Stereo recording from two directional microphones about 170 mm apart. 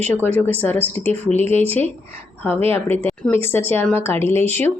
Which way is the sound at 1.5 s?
35° right (ahead or behind).